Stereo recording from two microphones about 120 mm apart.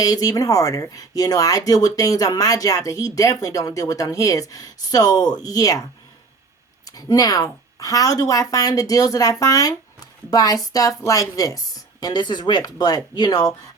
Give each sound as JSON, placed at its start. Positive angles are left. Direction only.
{"t": 0.0, "sound": "a woman's voice", "side_deg": 30}
{"t": 6.8, "sound": "a woman's voice", "side_deg": 30}